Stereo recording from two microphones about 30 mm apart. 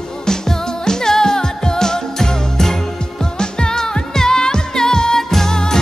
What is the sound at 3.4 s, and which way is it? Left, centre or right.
Music, left.